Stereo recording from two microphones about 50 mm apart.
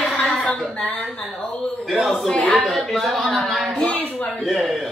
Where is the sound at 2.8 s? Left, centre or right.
Centre.